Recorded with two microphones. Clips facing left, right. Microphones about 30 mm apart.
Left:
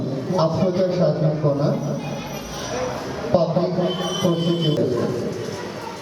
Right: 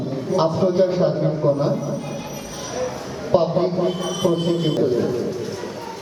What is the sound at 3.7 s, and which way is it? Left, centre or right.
Music, centre.